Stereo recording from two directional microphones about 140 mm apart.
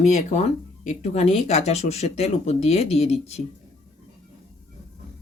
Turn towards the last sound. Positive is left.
turn(degrees=50)  # may be behind; listen again after turning